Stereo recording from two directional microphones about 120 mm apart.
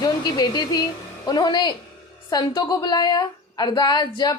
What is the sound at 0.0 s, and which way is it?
A woman's voice, 35° left (ahead or behind).